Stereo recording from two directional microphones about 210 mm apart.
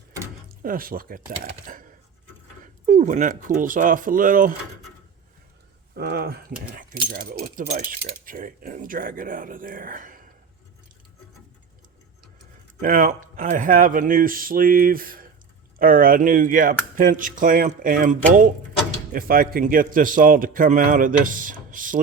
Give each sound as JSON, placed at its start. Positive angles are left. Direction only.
{"t": 0.4, "sound": "speech", "side_deg": -40}
{"t": 2.8, "sound": "speech", "side_deg": -40}
{"t": 5.9, "sound": "speech", "side_deg": -50}
{"t": 12.8, "sound": "speech", "side_deg": -40}